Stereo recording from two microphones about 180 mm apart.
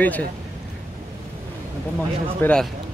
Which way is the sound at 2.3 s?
10° left (ahead or behind).